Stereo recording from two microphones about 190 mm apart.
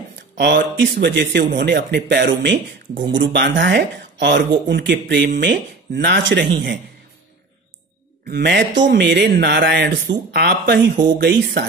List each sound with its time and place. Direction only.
0.4 s speech: 70° right (ahead or behind)
8.3 s speech: 60° right (ahead or behind)